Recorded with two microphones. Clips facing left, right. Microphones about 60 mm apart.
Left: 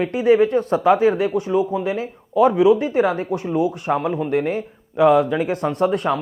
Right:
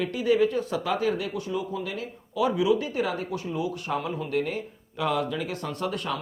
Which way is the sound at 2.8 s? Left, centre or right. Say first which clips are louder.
Left 9 dB; left.